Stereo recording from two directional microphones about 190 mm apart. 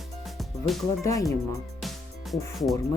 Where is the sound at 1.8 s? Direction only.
Centre (ahead or behind).